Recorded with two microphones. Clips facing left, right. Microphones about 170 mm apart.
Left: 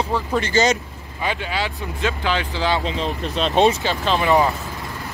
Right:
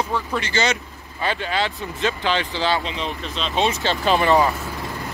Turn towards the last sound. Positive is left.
turn(degrees=0)  # may be behind; listen again after turning